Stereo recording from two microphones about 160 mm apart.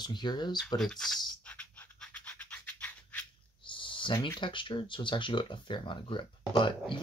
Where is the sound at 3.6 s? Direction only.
30° left (ahead or behind).